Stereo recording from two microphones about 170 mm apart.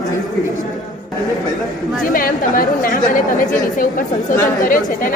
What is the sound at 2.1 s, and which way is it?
A woman's voice, 55° left (ahead or behind).